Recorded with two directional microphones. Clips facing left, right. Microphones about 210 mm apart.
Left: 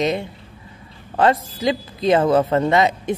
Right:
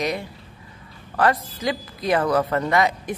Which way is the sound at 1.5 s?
25° left (ahead or behind).